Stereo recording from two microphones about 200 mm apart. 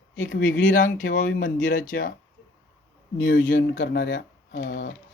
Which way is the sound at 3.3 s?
65° left (ahead or behind).